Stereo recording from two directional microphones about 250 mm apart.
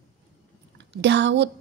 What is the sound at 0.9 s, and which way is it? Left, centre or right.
Speech, right.